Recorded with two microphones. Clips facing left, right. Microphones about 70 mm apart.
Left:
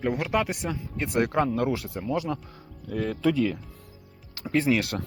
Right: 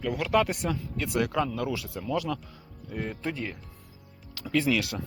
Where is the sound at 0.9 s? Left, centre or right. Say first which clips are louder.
Left 4 dB; left.